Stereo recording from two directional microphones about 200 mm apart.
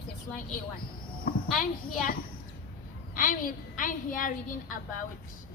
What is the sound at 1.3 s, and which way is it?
Speech, 50° left (ahead or behind).